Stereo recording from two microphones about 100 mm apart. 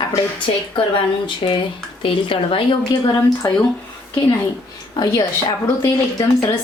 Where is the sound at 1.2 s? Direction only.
55° left (ahead or behind).